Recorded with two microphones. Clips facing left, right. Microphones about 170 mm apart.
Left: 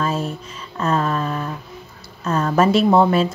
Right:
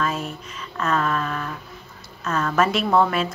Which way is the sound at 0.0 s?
30° left (ahead or behind).